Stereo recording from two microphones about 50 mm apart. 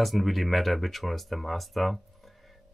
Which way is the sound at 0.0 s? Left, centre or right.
Centre.